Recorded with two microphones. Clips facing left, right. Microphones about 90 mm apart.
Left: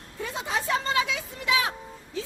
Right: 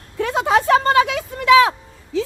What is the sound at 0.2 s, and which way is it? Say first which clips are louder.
Vehicle: right 13 dB; 70° right (ahead or behind).